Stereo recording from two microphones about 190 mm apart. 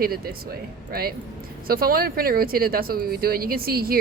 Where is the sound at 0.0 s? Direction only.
55° right (ahead or behind).